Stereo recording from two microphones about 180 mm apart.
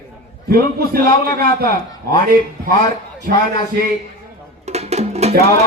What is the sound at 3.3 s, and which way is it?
Speech, 55° right (ahead or behind).